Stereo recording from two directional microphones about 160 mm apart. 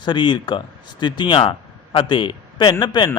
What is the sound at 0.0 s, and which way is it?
A man's voice, 30° left (ahead or behind).